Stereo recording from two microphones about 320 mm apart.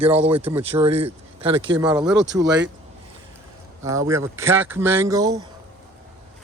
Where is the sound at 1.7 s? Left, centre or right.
Centre.